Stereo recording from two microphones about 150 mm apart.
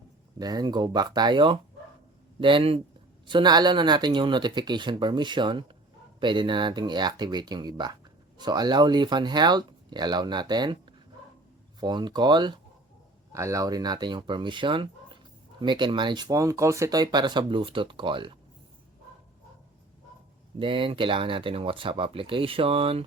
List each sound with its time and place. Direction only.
0.3 s speech: 25° right (ahead or behind)
20.6 s speech: 35° right (ahead or behind)